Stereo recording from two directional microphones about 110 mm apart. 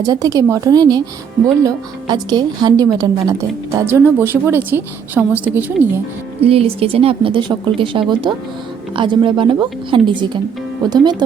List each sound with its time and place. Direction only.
0.0 s a woman's voice: 30° right (ahead or behind); by 5.9 s 15° right (ahead or behind)
6.4 s a woman's voice: 60° right (ahead or behind); by 11.2 s 40° right (ahead or behind)